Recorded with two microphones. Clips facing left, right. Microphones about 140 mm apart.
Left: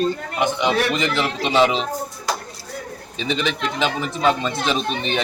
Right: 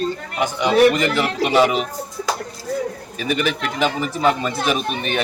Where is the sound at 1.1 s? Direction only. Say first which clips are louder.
Right 2 dB; 5° right (ahead or behind).